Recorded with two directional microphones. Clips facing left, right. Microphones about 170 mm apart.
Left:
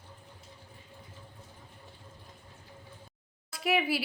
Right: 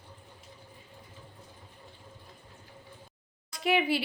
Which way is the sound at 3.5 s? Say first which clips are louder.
Right 2 dB; 5° left (ahead or behind).